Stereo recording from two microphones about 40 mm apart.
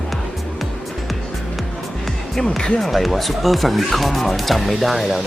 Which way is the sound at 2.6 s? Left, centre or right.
Centre.